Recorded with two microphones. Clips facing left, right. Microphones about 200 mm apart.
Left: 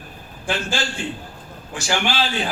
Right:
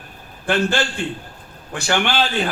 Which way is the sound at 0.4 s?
60° right (ahead or behind).